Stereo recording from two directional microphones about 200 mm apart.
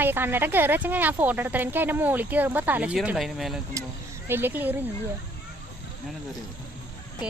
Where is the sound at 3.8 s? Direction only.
15° right (ahead or behind).